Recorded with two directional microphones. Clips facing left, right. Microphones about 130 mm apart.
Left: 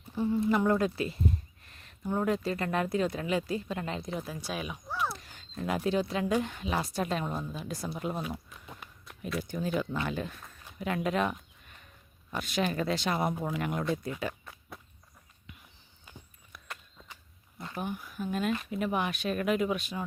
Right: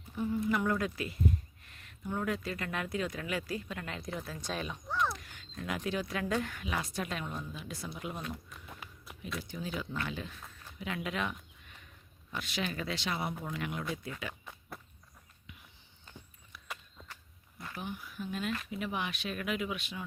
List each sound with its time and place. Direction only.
0.2 s speech: 30° left (ahead or behind); by 5.1 s 5° left (ahead or behind)
5.1 s speech: 35° left (ahead or behind)
8.4 s walk: centre (ahead or behind)
9.4 s speech: 50° left (ahead or behind)
16.1 s a sound: 10° left (ahead or behind)
16.6 s walk: centre (ahead or behind)
17.7 s speech: 50° left (ahead or behind)